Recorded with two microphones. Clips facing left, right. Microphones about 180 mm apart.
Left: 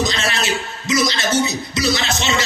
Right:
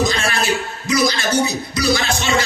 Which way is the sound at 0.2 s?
25° left (ahead or behind).